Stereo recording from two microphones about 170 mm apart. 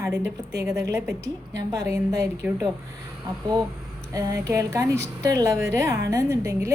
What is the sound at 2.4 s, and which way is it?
Speech, 5° right (ahead or behind).